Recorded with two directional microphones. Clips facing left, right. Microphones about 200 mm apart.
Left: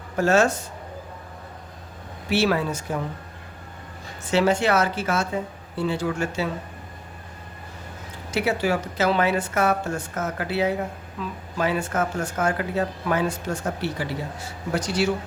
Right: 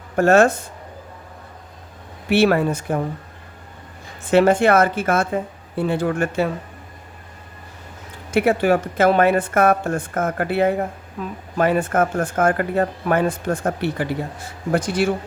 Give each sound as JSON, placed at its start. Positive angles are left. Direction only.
{"t": 0.2, "sound": "a woman's voice", "side_deg": -55}
{"t": 2.3, "sound": "a woman's voice", "side_deg": -55}
{"t": 4.3, "sound": "a woman's voice", "side_deg": -55}
{"t": 8.3, "sound": "a woman's voice", "side_deg": -55}